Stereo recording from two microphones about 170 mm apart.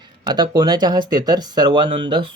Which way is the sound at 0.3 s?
25° right (ahead or behind).